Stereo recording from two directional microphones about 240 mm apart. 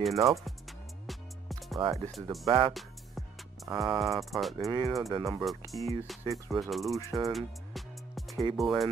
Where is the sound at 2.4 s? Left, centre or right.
Right.